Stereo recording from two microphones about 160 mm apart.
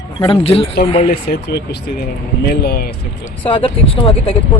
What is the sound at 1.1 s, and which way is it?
Speech, 80° left.